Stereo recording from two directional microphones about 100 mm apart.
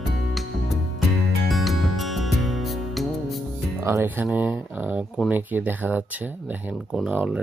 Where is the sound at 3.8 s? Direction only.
25° right (ahead or behind).